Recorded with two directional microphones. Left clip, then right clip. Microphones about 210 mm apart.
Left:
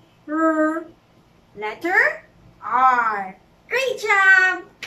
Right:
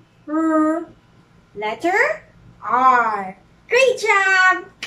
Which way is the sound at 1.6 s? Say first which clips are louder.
Right 1 dB; 15° right (ahead or behind).